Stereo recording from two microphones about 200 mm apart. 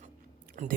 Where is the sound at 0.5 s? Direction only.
40° right (ahead or behind).